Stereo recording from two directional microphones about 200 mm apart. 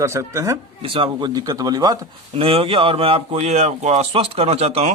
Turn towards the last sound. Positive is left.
turn(degrees=-30)  # may be behind; listen again after turning